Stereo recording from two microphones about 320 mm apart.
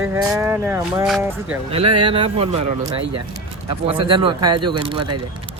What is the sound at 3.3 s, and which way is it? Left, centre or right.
Speech, centre.